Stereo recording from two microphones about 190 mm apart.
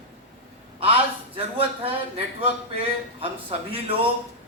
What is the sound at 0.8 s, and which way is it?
A man's voice, 30° right (ahead or behind).